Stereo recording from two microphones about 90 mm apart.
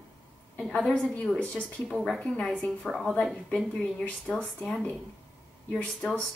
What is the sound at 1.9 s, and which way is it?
A woman's voice, 5° left (ahead or behind).